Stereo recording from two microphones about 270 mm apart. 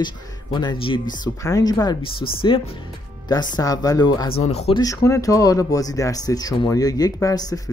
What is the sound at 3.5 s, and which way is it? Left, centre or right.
Speech, centre.